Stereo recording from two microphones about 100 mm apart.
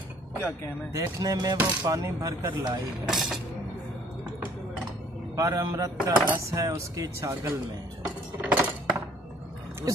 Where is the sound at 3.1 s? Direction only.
5° right (ahead or behind).